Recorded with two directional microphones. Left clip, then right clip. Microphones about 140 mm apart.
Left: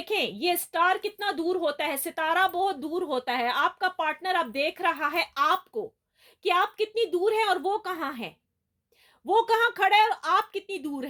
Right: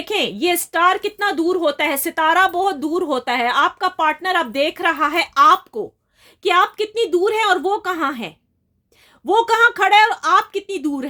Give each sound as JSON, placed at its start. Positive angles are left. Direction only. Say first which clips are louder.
{"t": 0.0, "sound": "a woman's voice", "louder": "right 8 dB", "side_deg": -40}